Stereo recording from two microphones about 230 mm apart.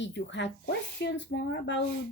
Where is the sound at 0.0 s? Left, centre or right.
Left.